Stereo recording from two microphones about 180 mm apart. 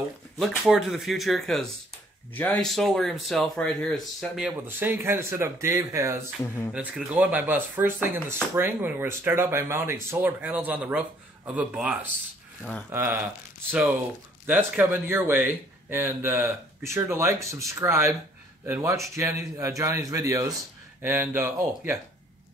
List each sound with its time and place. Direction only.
0.4 s speech: centre (ahead or behind)